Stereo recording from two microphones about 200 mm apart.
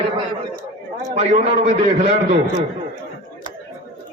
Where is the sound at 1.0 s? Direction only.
35° right (ahead or behind).